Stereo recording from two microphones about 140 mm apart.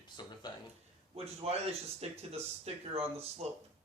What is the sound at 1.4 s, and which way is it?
Speech, 45° right (ahead or behind).